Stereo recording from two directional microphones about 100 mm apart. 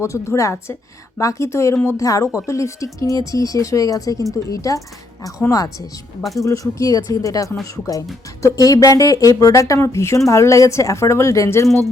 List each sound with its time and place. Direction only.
0.0 s a woman's voice: 30° left (ahead or behind)